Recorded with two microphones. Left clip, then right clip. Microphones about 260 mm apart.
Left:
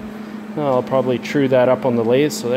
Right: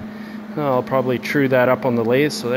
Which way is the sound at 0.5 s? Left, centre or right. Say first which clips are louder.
Left 1 dB; left.